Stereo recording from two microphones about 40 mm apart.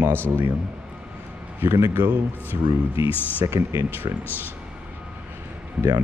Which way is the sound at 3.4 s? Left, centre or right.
Right.